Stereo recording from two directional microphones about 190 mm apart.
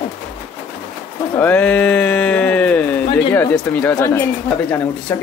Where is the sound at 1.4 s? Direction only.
10° left (ahead or behind).